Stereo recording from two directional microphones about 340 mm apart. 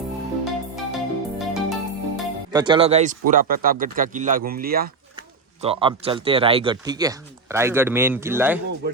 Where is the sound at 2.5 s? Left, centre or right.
Centre.